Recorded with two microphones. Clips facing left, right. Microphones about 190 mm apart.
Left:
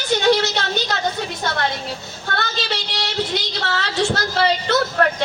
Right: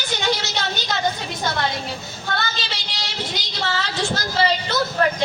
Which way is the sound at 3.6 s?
65° left (ahead or behind).